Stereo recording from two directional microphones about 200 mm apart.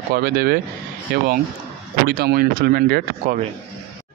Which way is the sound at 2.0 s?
50° right (ahead or behind).